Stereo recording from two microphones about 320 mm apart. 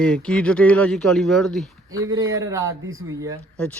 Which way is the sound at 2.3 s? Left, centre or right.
Centre.